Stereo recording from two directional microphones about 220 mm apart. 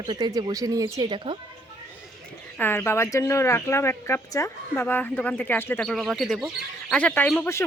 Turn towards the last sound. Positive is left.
turn(degrees=10)  # may be behind; listen again after turning